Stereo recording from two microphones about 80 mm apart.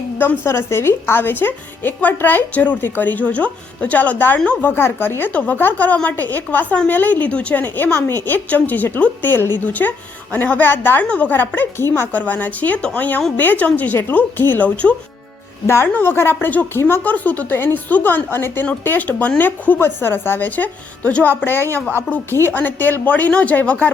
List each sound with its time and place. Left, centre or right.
0.2 s speech: left
15.6 s speech: left
15.9 s speech: centre